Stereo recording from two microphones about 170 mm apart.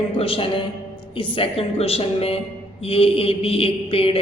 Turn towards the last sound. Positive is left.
turn(degrees=35)  # may be behind; listen again after turning